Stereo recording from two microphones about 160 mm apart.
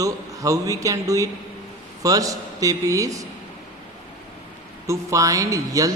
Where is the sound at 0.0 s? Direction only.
20° right (ahead or behind).